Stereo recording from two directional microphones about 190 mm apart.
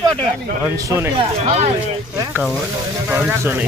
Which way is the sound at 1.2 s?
35° right (ahead or behind).